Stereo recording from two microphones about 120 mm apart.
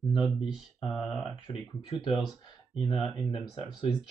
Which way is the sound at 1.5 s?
40° left (ahead or behind).